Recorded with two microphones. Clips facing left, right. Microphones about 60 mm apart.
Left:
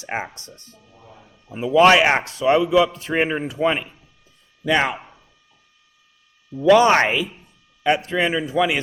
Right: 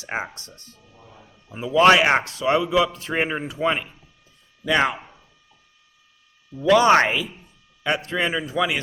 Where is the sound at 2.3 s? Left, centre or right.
Left.